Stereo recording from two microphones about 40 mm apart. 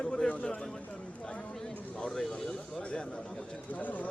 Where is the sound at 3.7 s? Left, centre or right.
Left.